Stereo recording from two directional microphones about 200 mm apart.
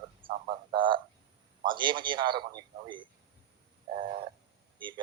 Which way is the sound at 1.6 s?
25° right (ahead or behind).